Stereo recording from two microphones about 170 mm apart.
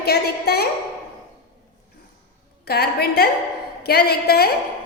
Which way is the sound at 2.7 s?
70° left (ahead or behind).